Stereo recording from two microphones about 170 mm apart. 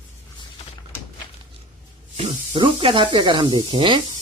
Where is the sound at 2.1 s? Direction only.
35° right (ahead or behind).